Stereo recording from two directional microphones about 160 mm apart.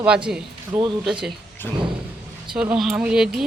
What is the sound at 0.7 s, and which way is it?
Speech, 30° right (ahead or behind).